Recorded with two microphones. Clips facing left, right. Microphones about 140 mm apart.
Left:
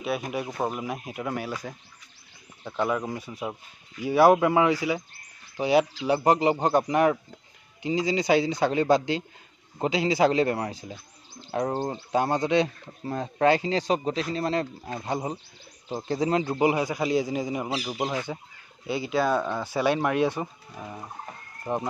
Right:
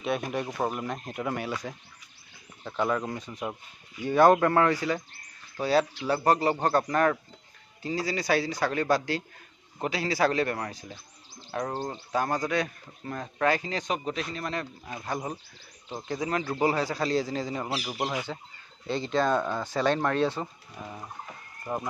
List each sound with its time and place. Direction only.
0.0 s a man's voice: 5° left (ahead or behind)
21.7 s speech: 25° left (ahead or behind)